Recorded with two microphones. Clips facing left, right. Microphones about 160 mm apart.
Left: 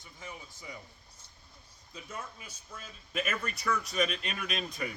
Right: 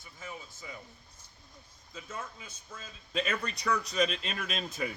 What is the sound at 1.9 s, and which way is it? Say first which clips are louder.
A man's voice: right 1 dB; 10° left (ahead or behind).